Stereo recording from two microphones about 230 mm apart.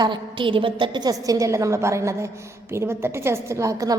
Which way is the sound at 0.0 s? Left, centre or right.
Right.